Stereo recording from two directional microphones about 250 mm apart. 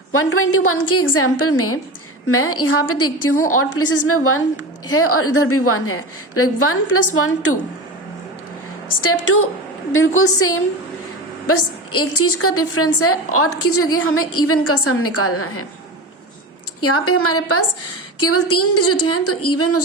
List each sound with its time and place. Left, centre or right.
0.1 s a woman's voice: left
10.2 s a woman's voice: left
16.8 s a woman's voice: left